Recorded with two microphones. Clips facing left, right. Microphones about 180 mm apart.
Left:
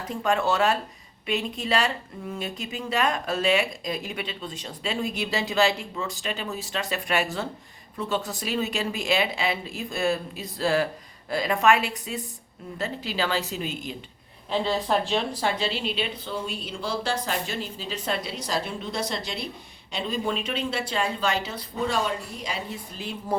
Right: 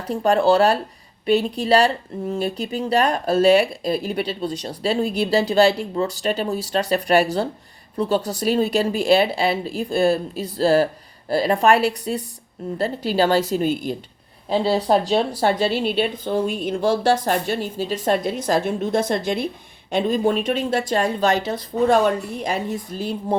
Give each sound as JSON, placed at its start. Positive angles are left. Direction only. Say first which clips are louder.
{"t": 0.1, "sound": "speech", "louder": "right 8 dB", "side_deg": -35}